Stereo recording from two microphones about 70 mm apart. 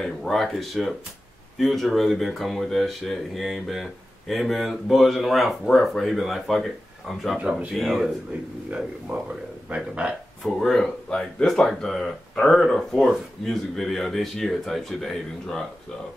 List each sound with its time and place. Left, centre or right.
0.0 s speech: centre
7.3 s speech: centre
7.7 s speech: centre
8.6 s speech: centre
10.4 s speech: centre